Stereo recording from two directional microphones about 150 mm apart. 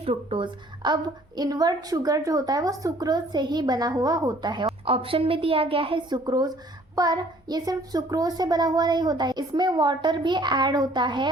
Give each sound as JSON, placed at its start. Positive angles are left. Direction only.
{"t": 0.0, "sound": "a woman's voice", "side_deg": -40}
{"t": 4.9, "sound": "a woman's voice", "side_deg": -40}